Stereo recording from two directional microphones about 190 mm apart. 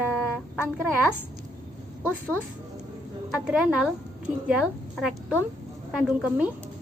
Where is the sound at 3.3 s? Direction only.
5° right (ahead or behind).